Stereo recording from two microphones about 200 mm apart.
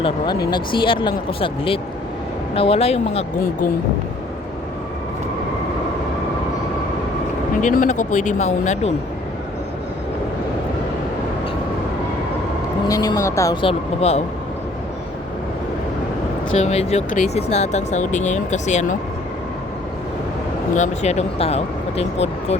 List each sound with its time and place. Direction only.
0.0 s speech: 20° left (ahead or behind)
7.6 s speech: 40° left (ahead or behind)
12.9 s speech: 15° left (ahead or behind)
16.6 s speech: 35° left (ahead or behind)
20.7 s speech: 35° left (ahead or behind)